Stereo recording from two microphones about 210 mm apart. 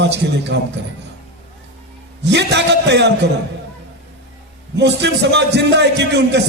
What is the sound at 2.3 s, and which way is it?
Speech, 55° right (ahead or behind).